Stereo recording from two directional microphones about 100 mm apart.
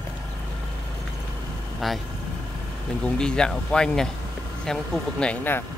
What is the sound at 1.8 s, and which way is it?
Speech, centre (ahead or behind).